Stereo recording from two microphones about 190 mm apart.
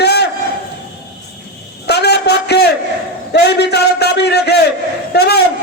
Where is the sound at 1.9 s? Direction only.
60° left (ahead or behind).